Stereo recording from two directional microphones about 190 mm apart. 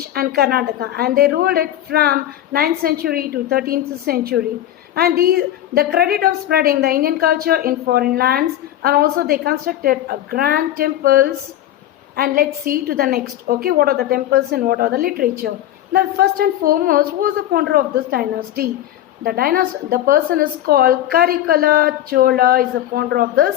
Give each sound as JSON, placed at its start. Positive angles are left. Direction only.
{"t": 0.1, "sound": "a woman's voice", "side_deg": -55}